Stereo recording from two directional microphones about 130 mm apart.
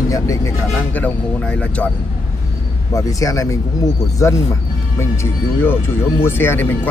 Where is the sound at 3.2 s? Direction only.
25° left (ahead or behind).